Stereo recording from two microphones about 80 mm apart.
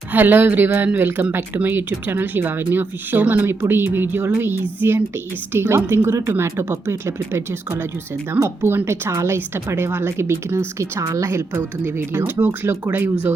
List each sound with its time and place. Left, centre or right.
0.1 s a woman's voice: right